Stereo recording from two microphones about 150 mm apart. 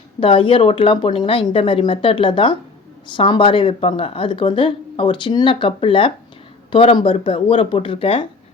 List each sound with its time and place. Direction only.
0.2 s speech: 35° left (ahead or behind)